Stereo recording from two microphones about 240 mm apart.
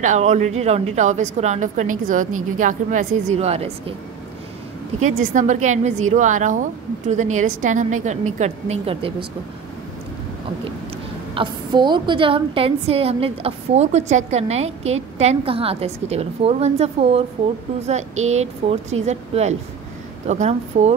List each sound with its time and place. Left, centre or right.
0.0 s a woman's voice: right
5.0 s a woman's voice: right
11.3 s a woman's voice: centre